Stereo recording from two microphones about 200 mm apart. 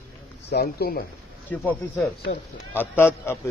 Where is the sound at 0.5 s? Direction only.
50° left (ahead or behind).